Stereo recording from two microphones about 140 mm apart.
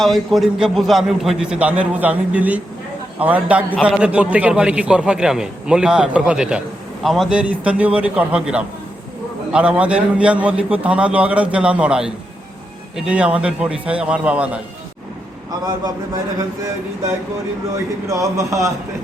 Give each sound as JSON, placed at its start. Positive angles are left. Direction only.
{"t": 0.0, "sound": "a man's voice", "side_deg": 0}
{"t": 15.6, "sound": "a man's voice", "side_deg": -25}
{"t": 18.1, "sound": "a man's voice", "side_deg": -25}